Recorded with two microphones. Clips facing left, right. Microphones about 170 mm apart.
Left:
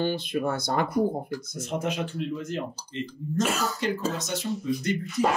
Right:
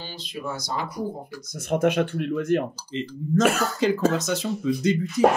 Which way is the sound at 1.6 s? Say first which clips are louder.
Right 9 dB; 60° right (ahead or behind).